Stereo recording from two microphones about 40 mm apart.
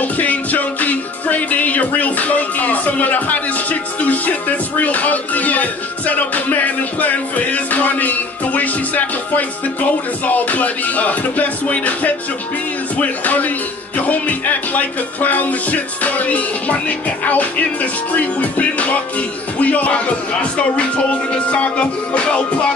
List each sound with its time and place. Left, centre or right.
0.0 s music: left